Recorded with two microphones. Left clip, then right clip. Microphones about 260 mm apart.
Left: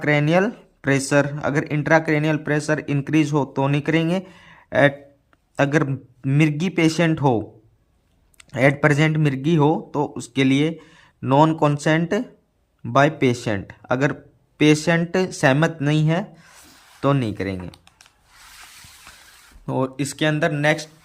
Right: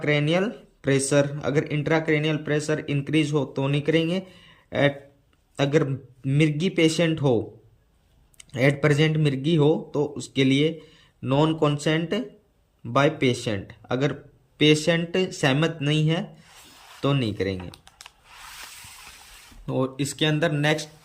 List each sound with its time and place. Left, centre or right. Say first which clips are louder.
0.0 s speech: left 4 dB; centre
19.6 s speech: left 3 dB; centre